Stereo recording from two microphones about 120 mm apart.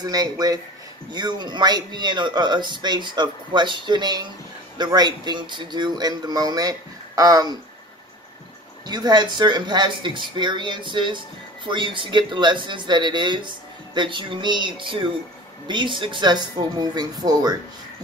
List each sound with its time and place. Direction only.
0.0 s speech: 30° right (ahead or behind)
8.8 s speech: 35° right (ahead or behind)